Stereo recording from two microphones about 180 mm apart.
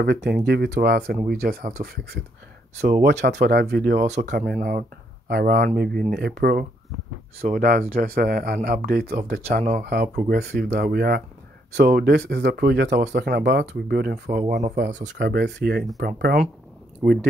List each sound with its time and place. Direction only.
0.0 s speech: 60° right (ahead or behind)
3.0 s speech: 70° right (ahead or behind)
7.4 s speech: 50° right (ahead or behind)
9.6 s speech: 45° right (ahead or behind); by 14.4 s 65° right (ahead or behind)
14.8 s speech: 80° right; by 17.3 s 60° right (ahead or behind)